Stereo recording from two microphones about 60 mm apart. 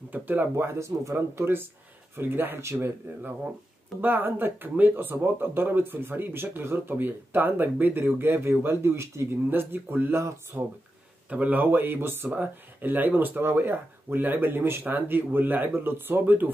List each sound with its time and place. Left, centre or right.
0.1 s speech: right
0.7 s speech: right
1.1 s speech: right
4.0 s speech: right
9.5 s speech: right
10.5 s speech: right
11.2 s speech: right
12.3 s speech: right